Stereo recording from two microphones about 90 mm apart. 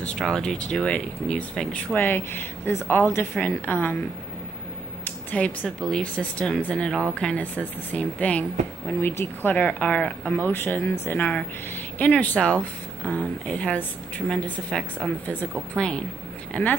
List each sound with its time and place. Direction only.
0.2 s speech: 5° left (ahead or behind)
2.0 s speech: 20° left (ahead or behind)
5.3 s speech: 15° left (ahead or behind)
16.5 s speech: 15° left (ahead or behind)